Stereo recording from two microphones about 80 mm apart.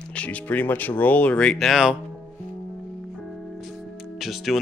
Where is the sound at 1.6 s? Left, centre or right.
Centre.